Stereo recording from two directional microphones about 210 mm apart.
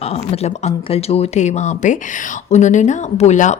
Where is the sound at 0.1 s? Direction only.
30° left (ahead or behind).